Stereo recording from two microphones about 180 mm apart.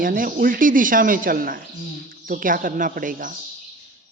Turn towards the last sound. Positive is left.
turn(degrees=-50)  # may be behind; listen again after turning